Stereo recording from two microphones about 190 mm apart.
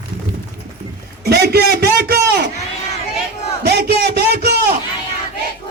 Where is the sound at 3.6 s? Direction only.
60° right (ahead or behind).